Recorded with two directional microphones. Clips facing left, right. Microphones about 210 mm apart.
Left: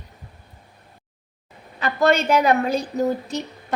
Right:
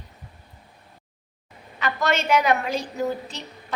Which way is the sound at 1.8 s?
35° left (ahead or behind).